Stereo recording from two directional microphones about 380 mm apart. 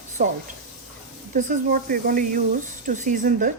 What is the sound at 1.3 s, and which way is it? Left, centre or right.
A woman's voice, right.